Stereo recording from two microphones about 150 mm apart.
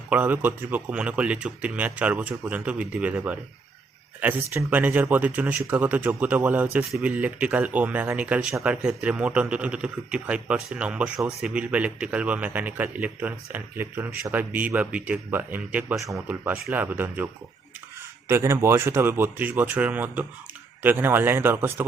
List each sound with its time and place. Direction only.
0.1 s speech: 10° right (ahead or behind)
18.3 s speech: 15° right (ahead or behind)